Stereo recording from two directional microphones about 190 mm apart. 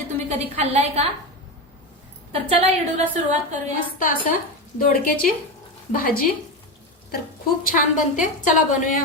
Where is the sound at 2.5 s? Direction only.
35° right (ahead or behind).